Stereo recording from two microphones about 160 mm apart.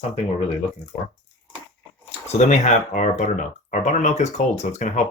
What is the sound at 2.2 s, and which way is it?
Speech, 45° left (ahead or behind).